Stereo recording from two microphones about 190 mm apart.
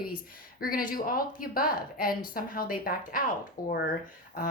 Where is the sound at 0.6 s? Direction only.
50° left (ahead or behind).